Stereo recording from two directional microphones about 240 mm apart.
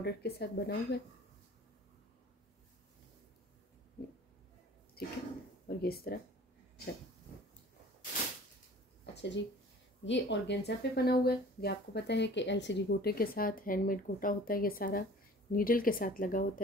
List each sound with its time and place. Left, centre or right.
0.0 s speech: left
5.0 s speech: left
9.1 s speech: left